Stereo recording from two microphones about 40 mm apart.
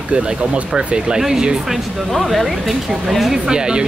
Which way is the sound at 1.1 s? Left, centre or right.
Centre.